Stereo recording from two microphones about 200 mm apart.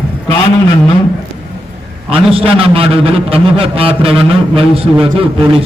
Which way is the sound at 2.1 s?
30° right (ahead or behind).